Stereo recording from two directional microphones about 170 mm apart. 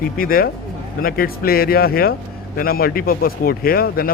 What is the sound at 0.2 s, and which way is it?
Speech, 60° left (ahead or behind).